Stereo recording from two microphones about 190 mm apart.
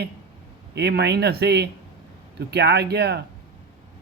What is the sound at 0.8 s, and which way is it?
A man's voice, 60° right (ahead or behind).